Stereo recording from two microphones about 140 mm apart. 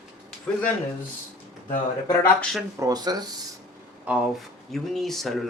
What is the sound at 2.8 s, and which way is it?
Speech, 25° right (ahead or behind).